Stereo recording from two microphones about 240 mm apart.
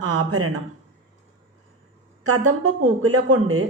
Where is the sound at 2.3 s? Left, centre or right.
Right.